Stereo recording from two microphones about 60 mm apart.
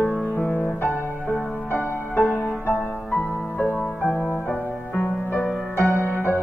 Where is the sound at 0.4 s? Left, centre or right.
Left.